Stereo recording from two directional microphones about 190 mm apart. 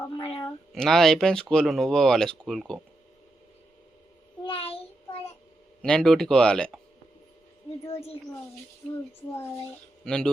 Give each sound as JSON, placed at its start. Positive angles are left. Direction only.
{"t": 0.7, "sound": "speech", "side_deg": 0}
{"t": 4.4, "sound": "a sound", "side_deg": 30}
{"t": 5.8, "sound": "speech", "side_deg": 5}
{"t": 7.9, "sound": "a woman's voice", "side_deg": 30}
{"t": 10.0, "sound": "speech", "side_deg": 5}